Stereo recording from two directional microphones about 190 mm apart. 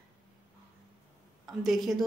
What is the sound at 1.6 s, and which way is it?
Speech, centre (ahead or behind).